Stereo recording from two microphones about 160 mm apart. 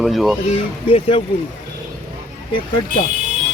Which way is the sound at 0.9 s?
35° left (ahead or behind).